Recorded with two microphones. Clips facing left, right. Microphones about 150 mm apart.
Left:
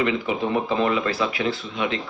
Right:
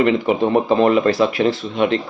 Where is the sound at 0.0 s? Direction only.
45° right (ahead or behind).